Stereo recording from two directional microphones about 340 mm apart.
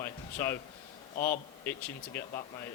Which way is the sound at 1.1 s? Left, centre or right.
Left.